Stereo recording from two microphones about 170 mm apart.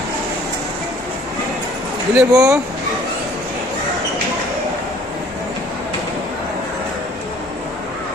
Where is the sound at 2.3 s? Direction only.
20° right (ahead or behind).